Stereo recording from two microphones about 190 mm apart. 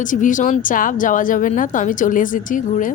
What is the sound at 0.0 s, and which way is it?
A woman's voice, 45° left (ahead or behind).